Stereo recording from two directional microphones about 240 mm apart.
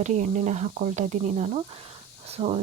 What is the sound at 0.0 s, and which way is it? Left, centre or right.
Speech, right.